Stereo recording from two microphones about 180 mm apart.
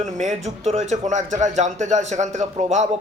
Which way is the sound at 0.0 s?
40° right (ahead or behind).